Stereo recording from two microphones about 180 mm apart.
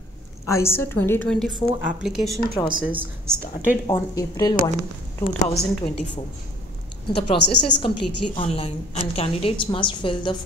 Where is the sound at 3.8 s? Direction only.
25° left (ahead or behind).